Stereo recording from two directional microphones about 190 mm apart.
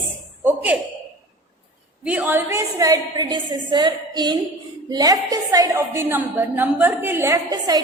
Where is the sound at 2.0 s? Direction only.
10° right (ahead or behind).